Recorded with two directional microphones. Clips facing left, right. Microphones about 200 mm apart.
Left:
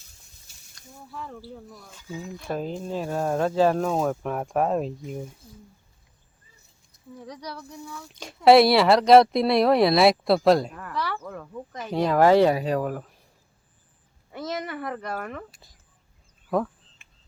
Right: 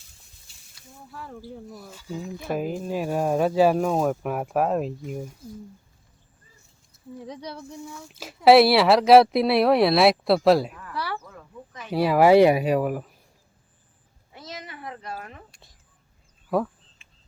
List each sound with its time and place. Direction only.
0.8 s speech: 5° right (ahead or behind)
2.1 s speech: centre (ahead or behind)
7.3 s speech: 25° right (ahead or behind)
8.0 s speech: 5° right (ahead or behind)
11.2 s a sound: 70° left (ahead or behind)
11.9 s speech: 5° right (ahead or behind)
14.3 s speech: 55° left (ahead or behind)